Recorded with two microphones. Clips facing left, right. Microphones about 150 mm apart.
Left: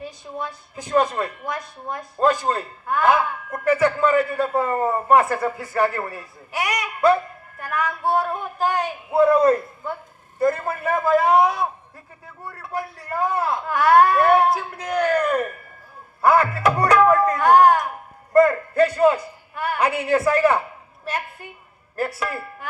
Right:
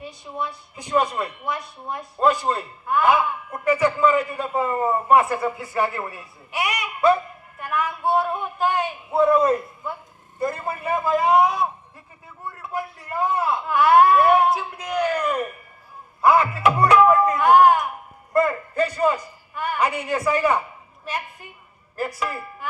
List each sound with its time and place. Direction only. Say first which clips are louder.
0.0 s a woman's voice: even; 40° left (ahead or behind)
12.7 s a man's voice: left 1 dB; 40° left (ahead or behind)
18.9 s a woman's voice: left 4 dB; 55° left (ahead or behind)
22.0 s a woman's voice: left 1 dB; 45° left (ahead or behind)